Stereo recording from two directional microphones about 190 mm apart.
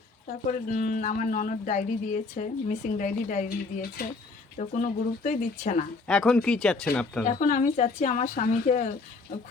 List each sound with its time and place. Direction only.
0.7 s speech: 45° left (ahead or behind)
6.1 s speech: 5° left (ahead or behind)
7.3 s speech: 40° left (ahead or behind)